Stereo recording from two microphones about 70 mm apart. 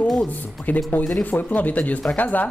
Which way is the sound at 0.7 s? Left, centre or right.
Left.